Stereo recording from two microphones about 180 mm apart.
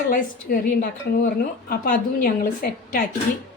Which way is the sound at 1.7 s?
55° left (ahead or behind).